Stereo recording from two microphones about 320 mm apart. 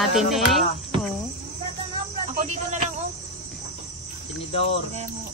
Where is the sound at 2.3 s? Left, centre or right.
Right.